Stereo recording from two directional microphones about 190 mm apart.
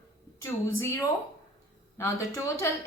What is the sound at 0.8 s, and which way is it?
A woman's voice, 15° left (ahead or behind).